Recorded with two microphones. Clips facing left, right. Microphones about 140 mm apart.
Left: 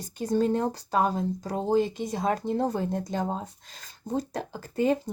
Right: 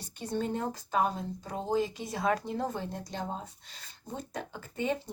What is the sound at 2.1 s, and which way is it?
Speech, 25° left (ahead or behind).